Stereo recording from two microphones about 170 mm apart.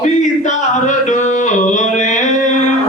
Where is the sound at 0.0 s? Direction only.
45° left (ahead or behind).